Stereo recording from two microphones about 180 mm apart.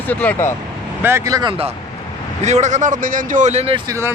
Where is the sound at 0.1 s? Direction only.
10° left (ahead or behind).